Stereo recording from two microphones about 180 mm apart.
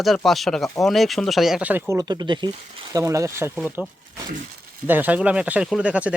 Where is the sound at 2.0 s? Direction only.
25° right (ahead or behind).